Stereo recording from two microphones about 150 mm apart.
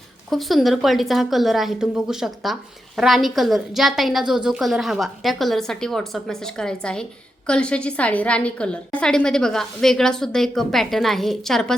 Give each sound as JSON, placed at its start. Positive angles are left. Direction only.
{"t": 0.3, "sound": "a woman's voice", "side_deg": 0}